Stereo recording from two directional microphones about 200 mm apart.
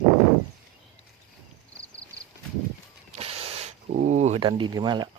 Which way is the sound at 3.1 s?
30° right (ahead or behind).